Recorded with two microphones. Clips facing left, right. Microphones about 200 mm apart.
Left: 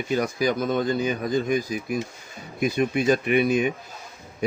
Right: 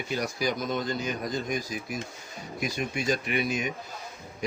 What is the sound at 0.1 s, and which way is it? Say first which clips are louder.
Speech: left 6 dB; 50° left (ahead or behind).